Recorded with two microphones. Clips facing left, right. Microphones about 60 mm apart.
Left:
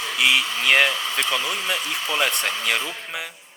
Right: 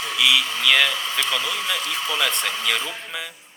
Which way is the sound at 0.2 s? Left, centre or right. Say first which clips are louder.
Even; left.